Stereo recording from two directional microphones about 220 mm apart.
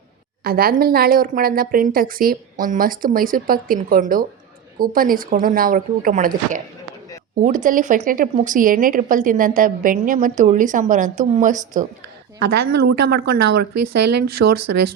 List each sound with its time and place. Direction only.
0.4 s a woman's voice: 45° right (ahead or behind)
12.4 s speech: 50° right (ahead or behind)